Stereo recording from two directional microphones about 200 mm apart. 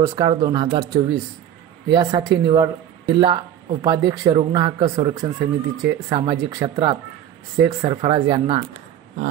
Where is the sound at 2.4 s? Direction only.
20° right (ahead or behind).